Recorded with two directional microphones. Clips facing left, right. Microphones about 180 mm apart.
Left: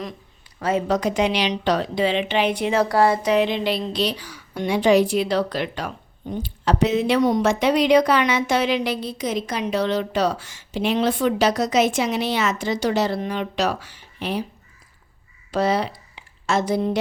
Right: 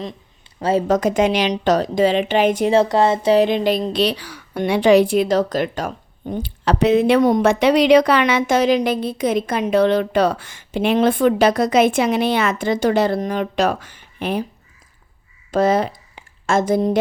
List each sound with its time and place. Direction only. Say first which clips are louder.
0.6 s speech: right 4 dB; 30° right (ahead or behind)
0.9 s a woman's voice: right 5 dB; 50° right (ahead or behind)
2.7 s speech: even; 20° right (ahead or behind)
3.3 s a woman's voice: right 5 dB; 45° right (ahead or behind)
4.0 s speech: right 4 dB; 65° right (ahead or behind)
8.5 s a woman's voice: right 5 dB; 45° right (ahead or behind)
15.5 s speech: right 4 dB; 50° right (ahead or behind)